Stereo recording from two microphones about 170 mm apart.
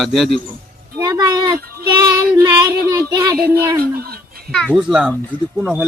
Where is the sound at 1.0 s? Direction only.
25° right (ahead or behind).